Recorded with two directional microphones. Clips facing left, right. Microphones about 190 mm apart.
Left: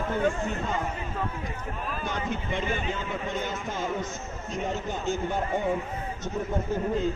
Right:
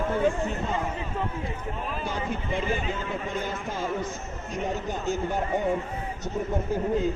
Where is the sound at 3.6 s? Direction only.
10° right (ahead or behind).